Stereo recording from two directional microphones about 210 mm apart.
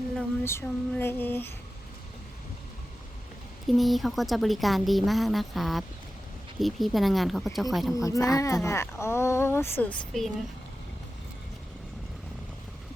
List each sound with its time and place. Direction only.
0.2 s female singing: 10° left (ahead or behind)
3.7 s a woman's voice: centre (ahead or behind)
7.9 s speech: 15° left (ahead or behind)